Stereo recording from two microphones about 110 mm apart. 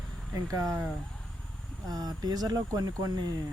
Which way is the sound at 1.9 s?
35° right (ahead or behind).